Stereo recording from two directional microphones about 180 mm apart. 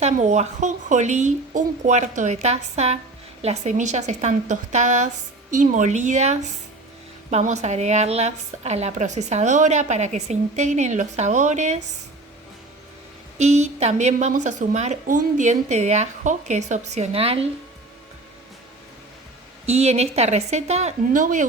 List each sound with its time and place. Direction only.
0.0 s speech: 40° right (ahead or behind)
13.4 s speech: 40° right (ahead or behind)
19.6 s speech: 35° right (ahead or behind)